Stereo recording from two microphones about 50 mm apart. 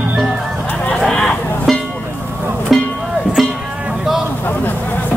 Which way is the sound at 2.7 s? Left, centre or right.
Centre.